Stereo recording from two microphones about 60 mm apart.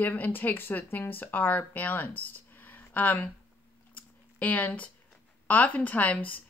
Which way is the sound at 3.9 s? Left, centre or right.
Left.